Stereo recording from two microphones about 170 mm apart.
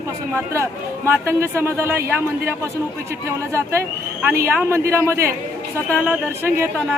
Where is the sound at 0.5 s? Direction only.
15° right (ahead or behind).